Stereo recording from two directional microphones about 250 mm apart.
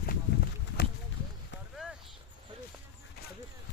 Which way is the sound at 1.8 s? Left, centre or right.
Centre.